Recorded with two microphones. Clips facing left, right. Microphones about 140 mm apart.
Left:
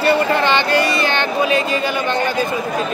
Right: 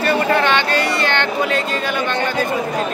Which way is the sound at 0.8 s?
70° right (ahead or behind).